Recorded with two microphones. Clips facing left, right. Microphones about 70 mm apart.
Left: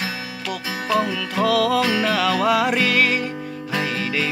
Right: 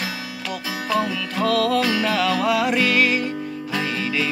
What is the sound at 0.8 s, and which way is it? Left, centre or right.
Music, centre.